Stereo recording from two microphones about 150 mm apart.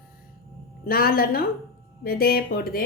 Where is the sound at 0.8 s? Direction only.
85° left.